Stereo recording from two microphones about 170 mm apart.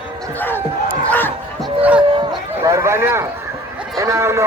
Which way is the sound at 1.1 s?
10° left (ahead or behind).